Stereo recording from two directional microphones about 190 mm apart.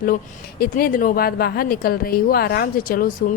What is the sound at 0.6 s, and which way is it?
A woman's voice, 50° left (ahead or behind).